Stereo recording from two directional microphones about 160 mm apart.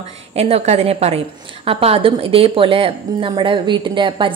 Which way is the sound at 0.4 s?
40° right (ahead or behind).